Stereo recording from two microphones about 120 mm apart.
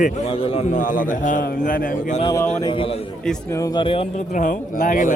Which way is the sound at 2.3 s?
20° left (ahead or behind).